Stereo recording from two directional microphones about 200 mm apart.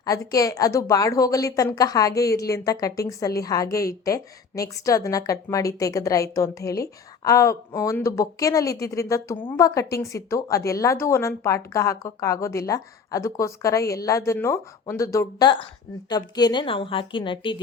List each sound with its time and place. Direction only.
0.0 s a woman's voice: 15° left (ahead or behind)